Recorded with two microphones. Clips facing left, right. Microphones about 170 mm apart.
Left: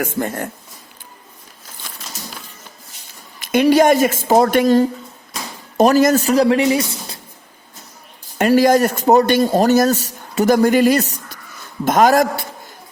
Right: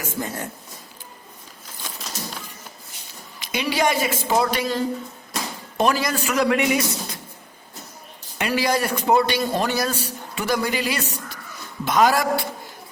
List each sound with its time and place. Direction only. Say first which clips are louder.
0.0 s speech: left 7 dB; 55° left (ahead or behind)
3.4 s a man's voice: left 10 dB; 50° left (ahead or behind); by 7.2 s 30° left (ahead or behind)
8.4 s a man's voice: left 10 dB; 45° left (ahead or behind)